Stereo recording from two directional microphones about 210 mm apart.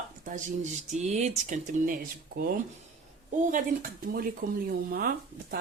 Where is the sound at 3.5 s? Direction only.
40° right (ahead or behind).